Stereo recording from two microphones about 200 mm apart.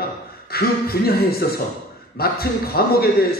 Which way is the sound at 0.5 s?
50° left (ahead or behind).